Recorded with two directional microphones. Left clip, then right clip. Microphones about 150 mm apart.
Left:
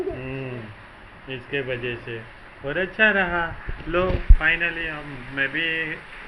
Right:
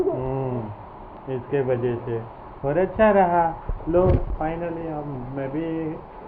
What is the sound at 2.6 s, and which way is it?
Speech, 15° left (ahead or behind).